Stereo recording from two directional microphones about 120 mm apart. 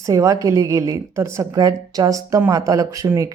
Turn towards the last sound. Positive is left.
turn(degrees=-30)  # may be behind; listen again after turning